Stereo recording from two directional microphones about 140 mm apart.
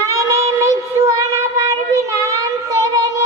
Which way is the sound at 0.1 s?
25° right (ahead or behind).